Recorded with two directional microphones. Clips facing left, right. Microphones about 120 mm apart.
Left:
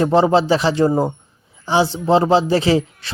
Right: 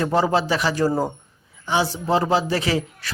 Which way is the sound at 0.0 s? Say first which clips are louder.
Left 6 dB; 25° left (ahead or behind).